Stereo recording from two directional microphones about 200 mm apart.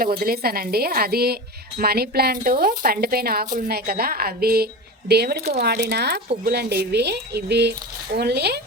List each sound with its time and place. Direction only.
0.0 s a woman's voice: 45° right (ahead or behind)